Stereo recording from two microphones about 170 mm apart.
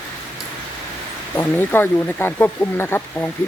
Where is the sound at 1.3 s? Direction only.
10° left (ahead or behind).